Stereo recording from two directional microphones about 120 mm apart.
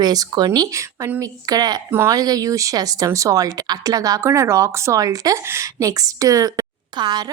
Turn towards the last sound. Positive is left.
turn(degrees=-35)  # may be behind; listen again after turning